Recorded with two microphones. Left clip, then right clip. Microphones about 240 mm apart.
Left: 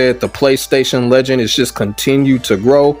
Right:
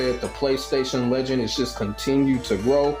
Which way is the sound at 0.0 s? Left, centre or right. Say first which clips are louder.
Left 12 dB; left.